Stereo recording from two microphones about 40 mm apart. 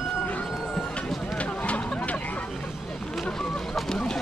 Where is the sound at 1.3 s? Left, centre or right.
Left.